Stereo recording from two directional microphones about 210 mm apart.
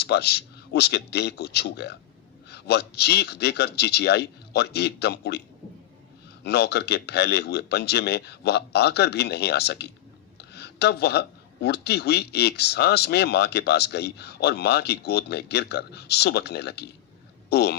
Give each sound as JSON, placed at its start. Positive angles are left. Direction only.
{"t": 0.0, "sound": "speech", "side_deg": 50}
{"t": 6.4, "sound": "speech", "side_deg": 50}